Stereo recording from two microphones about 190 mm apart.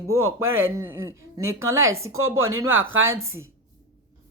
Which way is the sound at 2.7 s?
90° right.